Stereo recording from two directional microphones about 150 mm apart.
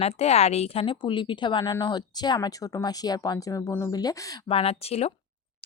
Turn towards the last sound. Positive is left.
turn(degrees=45)  # may be behind; listen again after turning